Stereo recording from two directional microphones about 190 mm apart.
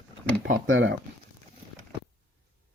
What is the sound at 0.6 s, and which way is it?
Speech, 85° right.